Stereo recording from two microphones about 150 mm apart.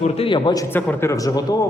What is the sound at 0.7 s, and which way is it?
Speech, 15° left (ahead or behind).